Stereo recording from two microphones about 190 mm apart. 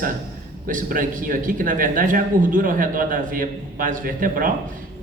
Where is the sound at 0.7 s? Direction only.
45° right (ahead or behind).